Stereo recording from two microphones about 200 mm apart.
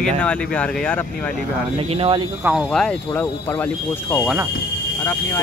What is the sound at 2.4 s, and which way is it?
Speech, centre (ahead or behind).